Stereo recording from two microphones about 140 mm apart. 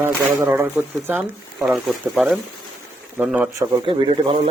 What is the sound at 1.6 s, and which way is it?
Speech, centre (ahead or behind).